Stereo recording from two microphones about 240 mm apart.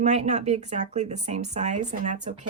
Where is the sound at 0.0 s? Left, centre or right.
Right.